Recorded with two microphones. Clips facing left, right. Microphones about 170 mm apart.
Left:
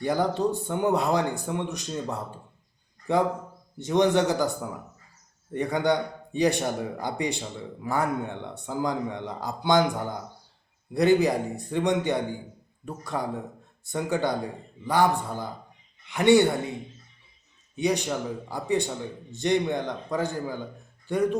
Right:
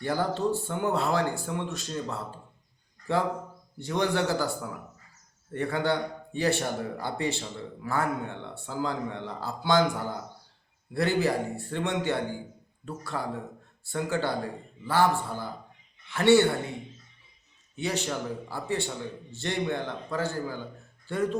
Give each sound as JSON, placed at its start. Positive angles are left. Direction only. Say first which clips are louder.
{"t": 0.0, "sound": "a man's voice", "louder": "left 3 dB", "side_deg": 15}
{"t": 10.9, "sound": "a man's voice", "louder": "left 5 dB", "side_deg": 15}
{"t": 17.7, "sound": "a man's voice", "louder": "left 5 dB", "side_deg": 15}